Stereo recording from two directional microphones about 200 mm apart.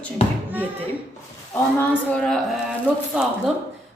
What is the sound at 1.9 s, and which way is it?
A woman's voice, 5° left (ahead or behind).